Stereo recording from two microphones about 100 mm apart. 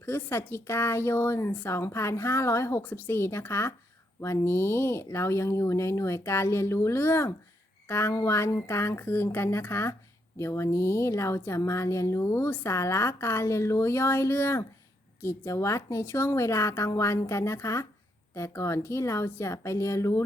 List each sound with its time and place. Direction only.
0.0 s a woman's voice: 25° left (ahead or behind)